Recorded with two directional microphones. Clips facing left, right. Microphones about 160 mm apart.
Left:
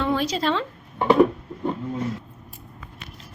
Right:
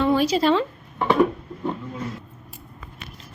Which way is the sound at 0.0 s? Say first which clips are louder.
Right 4 dB; 5° right (ahead or behind).